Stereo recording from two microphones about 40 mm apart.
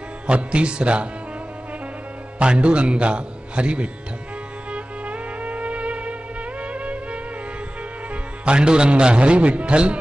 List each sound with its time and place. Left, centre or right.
0.3 s a man's voice: right
2.3 s a man's voice: right
4.7 s music: right
8.1 s a man's voice: right